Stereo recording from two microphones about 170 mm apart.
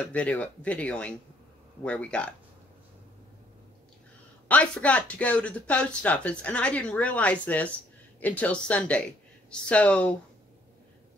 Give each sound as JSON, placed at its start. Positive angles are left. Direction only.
{"t": 0.1, "sound": "speech", "side_deg": 10}
{"t": 4.5, "sound": "speech", "side_deg": 5}